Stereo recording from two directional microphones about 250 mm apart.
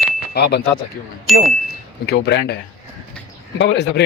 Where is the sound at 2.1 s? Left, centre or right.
Left.